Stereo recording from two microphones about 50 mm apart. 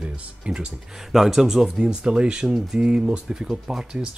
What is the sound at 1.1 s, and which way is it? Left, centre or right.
Speech, centre.